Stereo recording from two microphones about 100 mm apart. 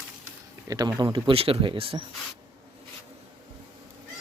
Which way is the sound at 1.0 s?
45° right (ahead or behind).